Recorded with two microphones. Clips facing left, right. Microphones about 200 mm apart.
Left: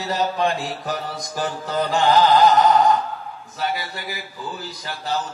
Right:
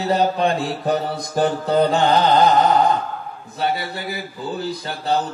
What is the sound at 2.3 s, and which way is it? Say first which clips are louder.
Speech: even; 25° right (ahead or behind).